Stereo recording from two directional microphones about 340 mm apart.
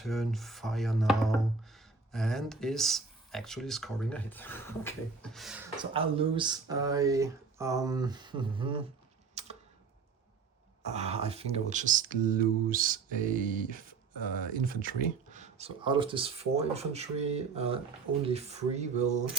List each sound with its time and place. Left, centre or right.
0.0 s speech: centre
5.8 s speech: centre
9.3 s a sound: centre
10.8 s speech: centre